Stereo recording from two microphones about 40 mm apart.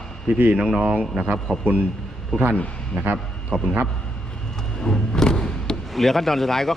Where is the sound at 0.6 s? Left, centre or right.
Right.